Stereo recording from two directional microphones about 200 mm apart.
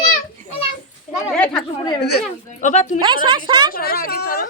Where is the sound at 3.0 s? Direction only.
25° right (ahead or behind).